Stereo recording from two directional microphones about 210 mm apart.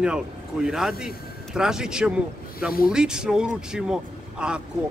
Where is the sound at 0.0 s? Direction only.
5° right (ahead or behind).